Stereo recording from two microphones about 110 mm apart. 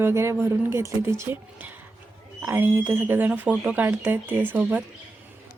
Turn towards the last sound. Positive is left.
turn(degrees=-15)  # may be behind; listen again after turning